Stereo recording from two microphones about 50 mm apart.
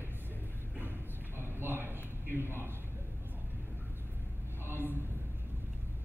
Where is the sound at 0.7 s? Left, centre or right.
Right.